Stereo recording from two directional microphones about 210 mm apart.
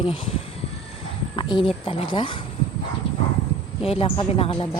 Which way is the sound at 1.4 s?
25° left (ahead or behind).